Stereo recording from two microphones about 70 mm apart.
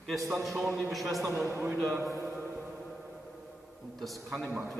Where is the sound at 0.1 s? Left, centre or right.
Centre.